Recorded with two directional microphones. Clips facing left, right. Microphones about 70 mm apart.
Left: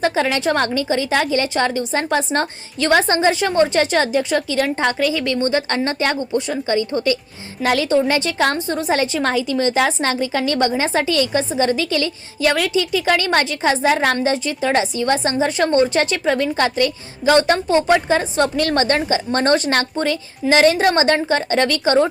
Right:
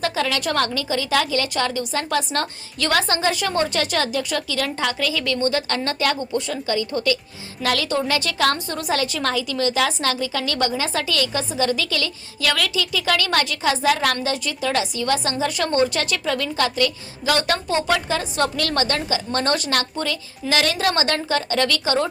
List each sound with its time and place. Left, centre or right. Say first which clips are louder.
0.0 s a woman's voice: left 5 dB; left